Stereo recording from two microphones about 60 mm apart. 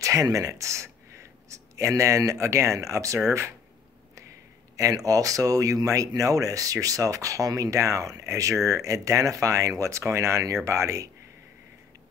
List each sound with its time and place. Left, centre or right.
0.0 s speech: right
3.3 s speech: right
4.7 s speech: right